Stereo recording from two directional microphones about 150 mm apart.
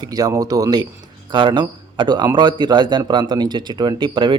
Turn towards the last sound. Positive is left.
turn(degrees=-30)  # may be behind; listen again after turning